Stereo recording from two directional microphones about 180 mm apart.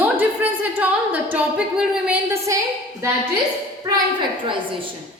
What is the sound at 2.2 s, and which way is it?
Speech, 15° right (ahead or behind).